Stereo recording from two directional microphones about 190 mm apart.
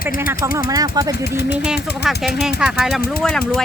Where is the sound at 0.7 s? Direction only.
20° right (ahead or behind).